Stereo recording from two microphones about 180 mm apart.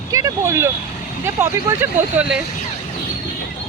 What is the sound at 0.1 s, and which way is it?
Speech, 20° right (ahead or behind).